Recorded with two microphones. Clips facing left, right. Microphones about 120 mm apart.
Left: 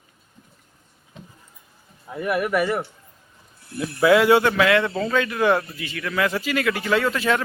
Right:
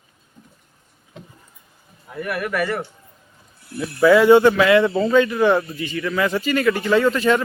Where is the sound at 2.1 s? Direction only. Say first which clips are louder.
Left 3 dB; 20° left (ahead or behind).